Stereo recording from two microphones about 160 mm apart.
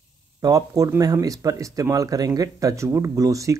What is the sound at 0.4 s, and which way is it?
Speech, 20° right (ahead or behind).